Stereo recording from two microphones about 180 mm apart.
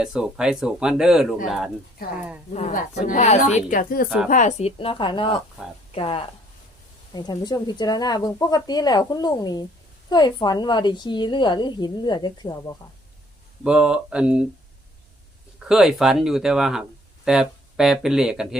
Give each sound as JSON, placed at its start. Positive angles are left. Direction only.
{"t": 0.0, "sound": "speech", "side_deg": -5}
{"t": 2.5, "sound": "a woman's voice", "side_deg": 45}
{"t": 13.7, "sound": "speech", "side_deg": -5}
{"t": 15.6, "sound": "speech", "side_deg": -5}